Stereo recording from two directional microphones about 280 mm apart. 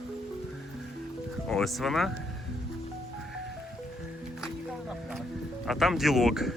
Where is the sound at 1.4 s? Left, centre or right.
Centre.